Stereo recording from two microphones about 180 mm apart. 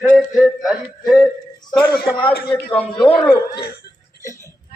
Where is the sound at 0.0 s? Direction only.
Centre (ahead or behind).